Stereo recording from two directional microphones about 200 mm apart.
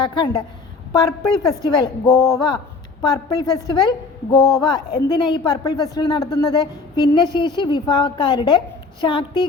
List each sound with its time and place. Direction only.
0.0 s a woman's voice: 25° left (ahead or behind)